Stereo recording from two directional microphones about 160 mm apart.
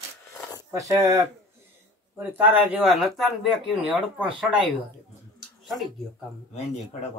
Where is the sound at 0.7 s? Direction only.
20° right (ahead or behind); by 3.9 s centre (ahead or behind).